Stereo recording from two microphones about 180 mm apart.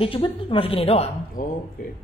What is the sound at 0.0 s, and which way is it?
A woman's voice, 30° left (ahead or behind).